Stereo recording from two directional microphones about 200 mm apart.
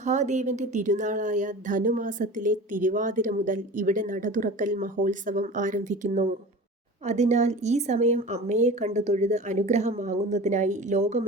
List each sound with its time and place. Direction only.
0.0 s a woman's voice: 35° right (ahead or behind)